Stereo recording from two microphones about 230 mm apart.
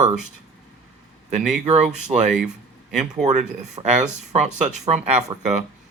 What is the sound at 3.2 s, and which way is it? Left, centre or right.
Speech, right.